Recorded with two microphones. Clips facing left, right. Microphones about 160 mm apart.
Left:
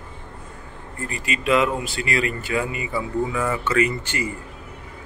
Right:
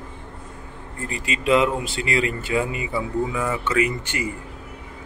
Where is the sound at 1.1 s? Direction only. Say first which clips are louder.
Right 1 dB; 25° right (ahead or behind).